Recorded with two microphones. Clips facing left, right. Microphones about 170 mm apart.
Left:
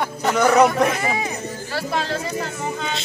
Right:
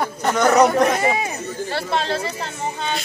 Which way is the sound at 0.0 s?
5° left (ahead or behind).